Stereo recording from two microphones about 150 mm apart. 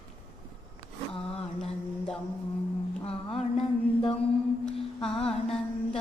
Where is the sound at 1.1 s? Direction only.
5° left (ahead or behind).